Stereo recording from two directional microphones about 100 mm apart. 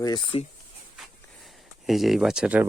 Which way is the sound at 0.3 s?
55° left (ahead or behind).